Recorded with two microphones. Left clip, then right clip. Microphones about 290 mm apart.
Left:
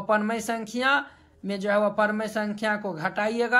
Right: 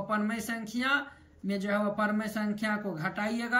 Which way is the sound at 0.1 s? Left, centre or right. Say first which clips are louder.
Left 10 dB; centre.